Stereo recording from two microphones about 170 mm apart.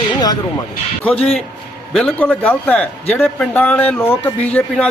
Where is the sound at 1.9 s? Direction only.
5° left (ahead or behind).